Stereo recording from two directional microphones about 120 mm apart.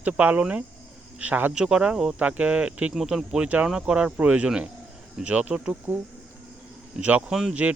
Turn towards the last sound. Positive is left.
turn(degrees=-10)  # may be behind; listen again after turning